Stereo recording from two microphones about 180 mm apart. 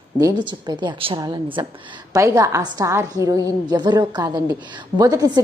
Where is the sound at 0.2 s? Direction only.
20° right (ahead or behind).